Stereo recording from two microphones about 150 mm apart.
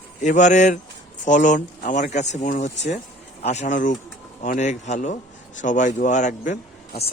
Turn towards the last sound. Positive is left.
turn(degrees=60)  # may be behind; listen again after turning